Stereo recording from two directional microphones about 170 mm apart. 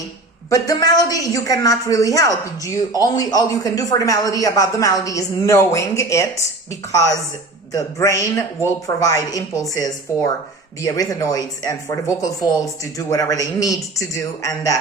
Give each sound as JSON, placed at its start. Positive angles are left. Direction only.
{"t": 0.5, "sound": "a man's voice", "side_deg": 20}